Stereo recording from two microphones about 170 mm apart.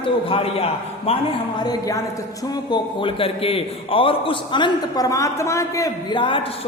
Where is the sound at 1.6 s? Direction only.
20° left (ahead or behind).